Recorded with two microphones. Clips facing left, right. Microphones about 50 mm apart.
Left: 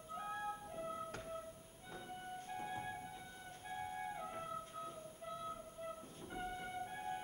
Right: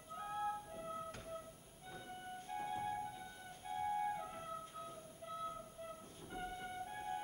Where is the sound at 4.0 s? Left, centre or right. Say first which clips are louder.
Right 3 dB; centre.